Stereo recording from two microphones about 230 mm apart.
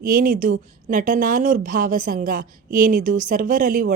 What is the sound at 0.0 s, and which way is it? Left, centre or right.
A woman's voice, right.